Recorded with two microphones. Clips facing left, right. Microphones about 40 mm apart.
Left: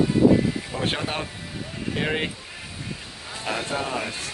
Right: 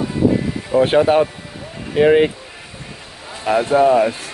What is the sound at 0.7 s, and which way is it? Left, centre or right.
Speech, centre.